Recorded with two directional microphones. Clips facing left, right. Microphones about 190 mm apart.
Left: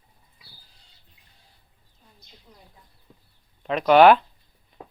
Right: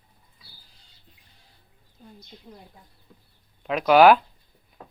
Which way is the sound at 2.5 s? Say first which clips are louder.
Right 8 dB; 45° right (ahead or behind).